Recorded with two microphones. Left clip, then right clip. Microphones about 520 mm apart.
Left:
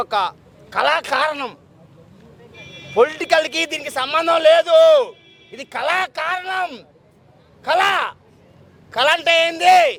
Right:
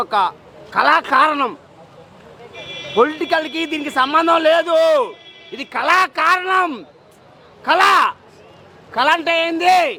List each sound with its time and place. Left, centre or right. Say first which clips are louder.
0.0 s a man's voice: right 3 dB; left
2.9 s a man's voice: left 1 dB; left